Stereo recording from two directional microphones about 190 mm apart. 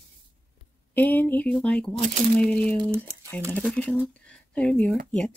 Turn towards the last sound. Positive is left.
turn(degrees=5)  # may be behind; listen again after turning